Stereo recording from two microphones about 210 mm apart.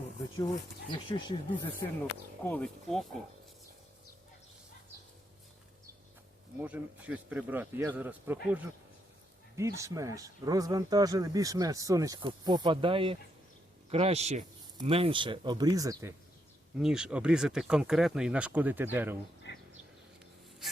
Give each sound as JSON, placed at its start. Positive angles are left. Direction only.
{"t": 0.3, "sound": "speech", "side_deg": 20}
{"t": 2.4, "sound": "bee", "side_deg": 10}
{"t": 6.6, "sound": "speech", "side_deg": -10}
{"t": 16.7, "sound": "speech", "side_deg": -5}